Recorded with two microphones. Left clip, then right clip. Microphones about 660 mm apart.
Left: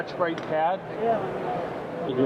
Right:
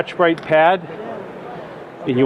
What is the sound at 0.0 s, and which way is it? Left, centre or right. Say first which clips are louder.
Speech: right 10 dB; right.